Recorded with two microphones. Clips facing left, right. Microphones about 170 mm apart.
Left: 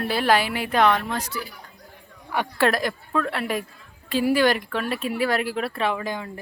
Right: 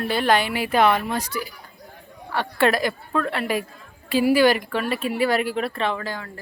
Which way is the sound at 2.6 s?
Centre (ahead or behind).